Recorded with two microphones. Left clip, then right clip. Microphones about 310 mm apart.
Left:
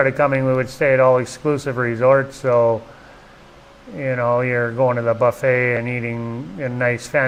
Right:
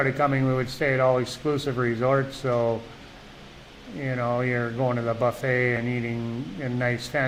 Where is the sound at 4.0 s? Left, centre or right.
Left.